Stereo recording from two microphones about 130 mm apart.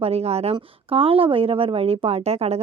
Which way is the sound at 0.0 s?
50° right (ahead or behind).